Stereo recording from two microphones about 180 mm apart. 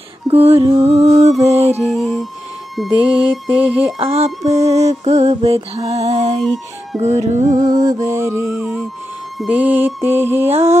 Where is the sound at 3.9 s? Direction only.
35° right (ahead or behind).